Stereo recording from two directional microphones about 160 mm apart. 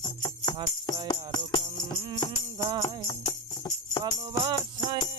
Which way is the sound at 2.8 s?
25° left (ahead or behind).